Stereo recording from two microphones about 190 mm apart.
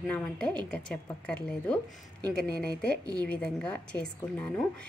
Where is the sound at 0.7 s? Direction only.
5° left (ahead or behind).